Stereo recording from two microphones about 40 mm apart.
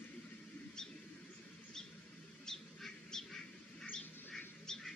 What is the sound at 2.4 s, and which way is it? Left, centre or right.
Bird, centre.